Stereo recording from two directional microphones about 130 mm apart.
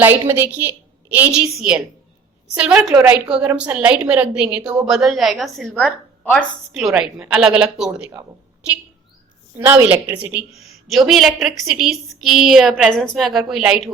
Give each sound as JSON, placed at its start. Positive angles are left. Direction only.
{"t": 0.0, "sound": "a woman's voice", "side_deg": -15}
{"t": 9.6, "sound": "a woman's voice", "side_deg": -15}
{"t": 10.8, "sound": "a woman's voice", "side_deg": 0}